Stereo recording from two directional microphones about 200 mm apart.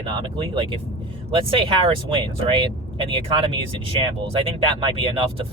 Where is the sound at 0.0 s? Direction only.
25° right (ahead or behind).